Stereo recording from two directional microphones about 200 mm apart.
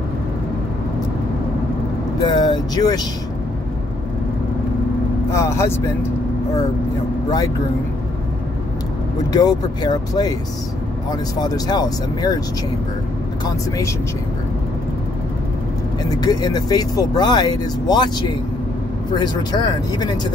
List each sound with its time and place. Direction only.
2.1 s speech: 20° left (ahead or behind)
5.3 s speech: 15° left (ahead or behind)
7.2 s speech: 20° left (ahead or behind)
9.3 s speech: 20° left (ahead or behind)
11.3 s speech: 20° left (ahead or behind)
16.0 s speech: 20° left (ahead or behind)